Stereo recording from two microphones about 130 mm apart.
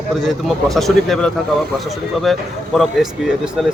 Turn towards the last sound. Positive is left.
turn(degrees=-5)  # may be behind; listen again after turning